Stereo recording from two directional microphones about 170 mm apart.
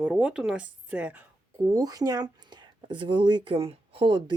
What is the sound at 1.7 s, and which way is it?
Speech, 20° right (ahead or behind).